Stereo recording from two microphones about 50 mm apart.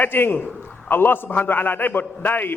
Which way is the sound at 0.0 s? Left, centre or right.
Left.